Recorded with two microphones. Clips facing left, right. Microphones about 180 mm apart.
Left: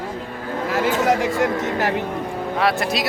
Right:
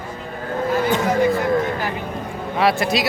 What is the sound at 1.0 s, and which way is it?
Speech, 90° left.